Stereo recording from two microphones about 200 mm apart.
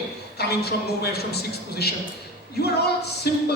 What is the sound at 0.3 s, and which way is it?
A man's voice, 50° left (ahead or behind).